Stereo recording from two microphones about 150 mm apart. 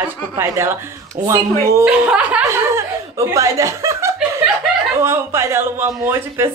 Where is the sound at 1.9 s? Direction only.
10° right (ahead or behind).